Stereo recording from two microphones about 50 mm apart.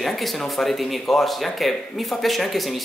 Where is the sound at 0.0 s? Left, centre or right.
Centre.